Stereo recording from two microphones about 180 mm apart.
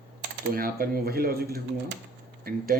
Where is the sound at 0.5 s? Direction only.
55° right (ahead or behind).